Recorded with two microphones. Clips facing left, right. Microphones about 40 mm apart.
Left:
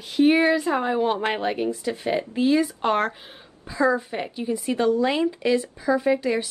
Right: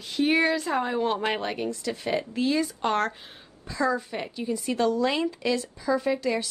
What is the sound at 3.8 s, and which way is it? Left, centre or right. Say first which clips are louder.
A woman's voice: left 4 dB; left.